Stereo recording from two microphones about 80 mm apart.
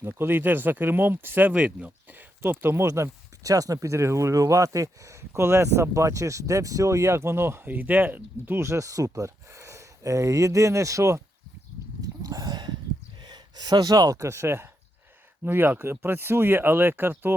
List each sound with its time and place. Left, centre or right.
0.0 s speech: right
2.8 s speech: right
8.6 s speech: right
12.0 s a sound: right
13.2 s speech: right